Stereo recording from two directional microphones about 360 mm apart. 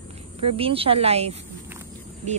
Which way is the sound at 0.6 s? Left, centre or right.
Centre.